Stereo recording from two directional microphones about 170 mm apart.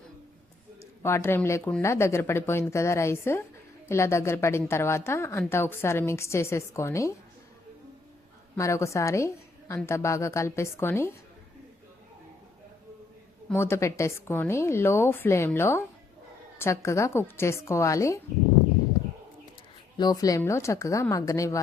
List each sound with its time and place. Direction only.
1.0 s a woman's voice: 15° left (ahead or behind)
8.5 s a woman's voice: 15° left (ahead or behind)
13.5 s a woman's voice: 15° left (ahead or behind)
20.0 s a woman's voice: 20° left (ahead or behind)